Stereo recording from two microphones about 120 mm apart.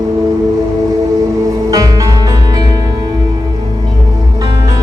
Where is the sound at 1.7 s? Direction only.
30° right (ahead or behind).